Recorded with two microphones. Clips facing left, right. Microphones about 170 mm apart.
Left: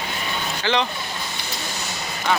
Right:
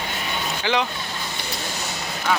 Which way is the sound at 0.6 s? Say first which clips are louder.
Left 1 dB; 10° right (ahead or behind).